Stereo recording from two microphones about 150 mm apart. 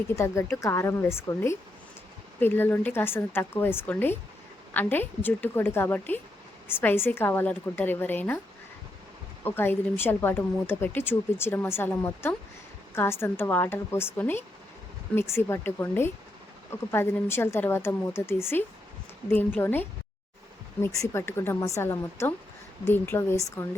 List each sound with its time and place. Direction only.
0.2 s speech: 20° left (ahead or behind)
9.4 s speech: 15° left (ahead or behind)